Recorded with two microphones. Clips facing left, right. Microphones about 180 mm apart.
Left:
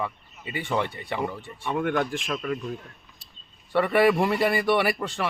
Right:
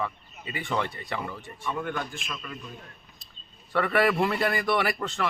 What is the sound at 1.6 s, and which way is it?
A man's voice, 65° left (ahead or behind).